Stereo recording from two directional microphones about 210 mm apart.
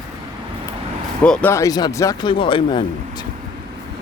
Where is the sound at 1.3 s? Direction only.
5° left (ahead or behind); by 3.2 s 25° left (ahead or behind).